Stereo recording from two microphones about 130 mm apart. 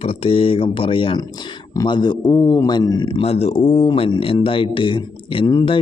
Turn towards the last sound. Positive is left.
turn(degrees=35)  # may be behind; listen again after turning